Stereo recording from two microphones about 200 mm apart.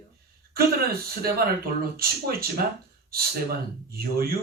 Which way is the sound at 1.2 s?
50° right (ahead or behind).